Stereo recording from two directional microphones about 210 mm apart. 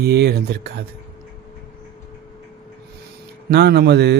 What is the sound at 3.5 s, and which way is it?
Speech, 50° right (ahead or behind).